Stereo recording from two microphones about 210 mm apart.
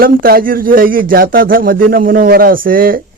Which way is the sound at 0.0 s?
45° right (ahead or behind).